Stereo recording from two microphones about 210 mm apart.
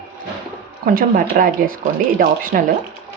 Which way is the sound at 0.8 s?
45° right (ahead or behind).